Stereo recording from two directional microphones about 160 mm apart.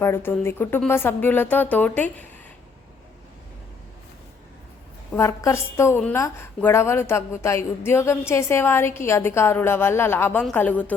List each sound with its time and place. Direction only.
0.0 s a woman's voice: 15° left (ahead or behind)
5.1 s a woman's voice: 15° left (ahead or behind)